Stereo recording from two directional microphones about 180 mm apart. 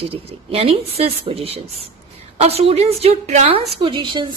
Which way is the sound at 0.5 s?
30° right (ahead or behind).